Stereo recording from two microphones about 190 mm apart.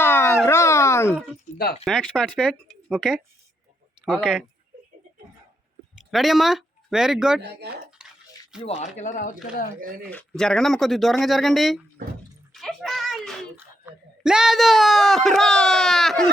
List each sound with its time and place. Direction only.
0.0 s a sound: 10° left (ahead or behind)
1.8 s speech: centre (ahead or behind)
6.0 s speech: centre (ahead or behind)
8.0 s bathtub: 5° right (ahead or behind)
8.6 s speech: 35° left (ahead or behind)
10.1 s speech: 5° left (ahead or behind)
12.0 s speech: 50° right (ahead or behind)
12.5 s a child's voice: centre (ahead or behind)